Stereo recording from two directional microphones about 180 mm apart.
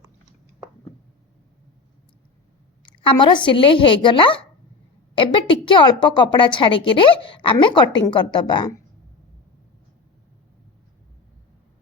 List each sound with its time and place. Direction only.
2.8 s a woman's voice: 25° left (ahead or behind)